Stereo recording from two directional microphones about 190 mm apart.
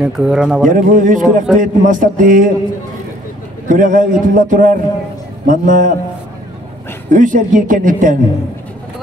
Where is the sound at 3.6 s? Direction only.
45° right (ahead or behind).